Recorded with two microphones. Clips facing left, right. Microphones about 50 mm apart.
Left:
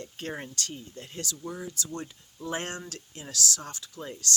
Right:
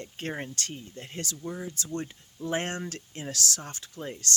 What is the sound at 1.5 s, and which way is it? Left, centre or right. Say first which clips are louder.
Speech: right 3 dB; right.